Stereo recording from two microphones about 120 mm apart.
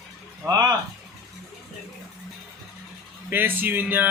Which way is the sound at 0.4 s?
35° right (ahead or behind).